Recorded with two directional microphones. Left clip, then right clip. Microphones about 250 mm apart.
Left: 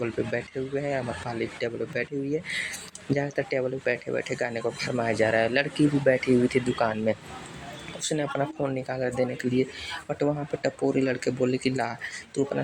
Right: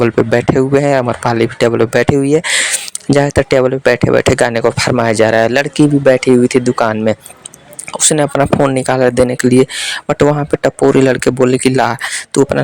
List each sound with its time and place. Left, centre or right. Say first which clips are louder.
0.0 s speech: right 18 dB; right